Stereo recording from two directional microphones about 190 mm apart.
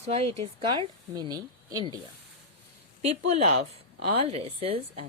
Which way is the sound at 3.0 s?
35° right (ahead or behind).